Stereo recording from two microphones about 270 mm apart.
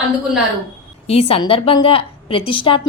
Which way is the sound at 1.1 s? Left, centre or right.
Left.